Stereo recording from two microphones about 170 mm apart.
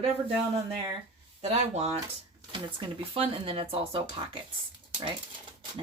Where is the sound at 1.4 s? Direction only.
40° right (ahead or behind).